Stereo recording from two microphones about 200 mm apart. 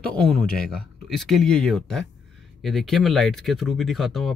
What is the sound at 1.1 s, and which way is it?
Speech, centre (ahead or behind).